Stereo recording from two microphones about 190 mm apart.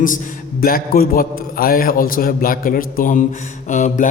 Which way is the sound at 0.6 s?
50° left (ahead or behind).